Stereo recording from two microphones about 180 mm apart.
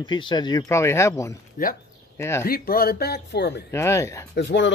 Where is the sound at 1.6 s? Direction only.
50° left (ahead or behind).